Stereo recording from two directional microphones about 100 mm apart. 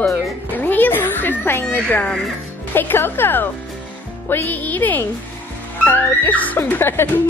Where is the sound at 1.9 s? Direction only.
15° left (ahead or behind).